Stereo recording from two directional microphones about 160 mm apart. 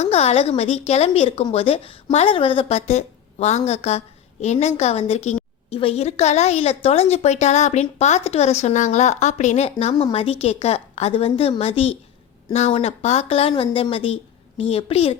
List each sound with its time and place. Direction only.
0.0 s a woman's voice: 40° left (ahead or behind)